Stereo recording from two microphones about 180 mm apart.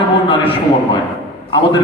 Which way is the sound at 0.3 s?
30° left (ahead or behind).